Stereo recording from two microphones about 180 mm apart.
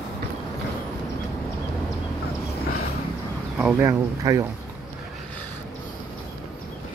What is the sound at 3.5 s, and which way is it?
Speech, 10° right (ahead or behind).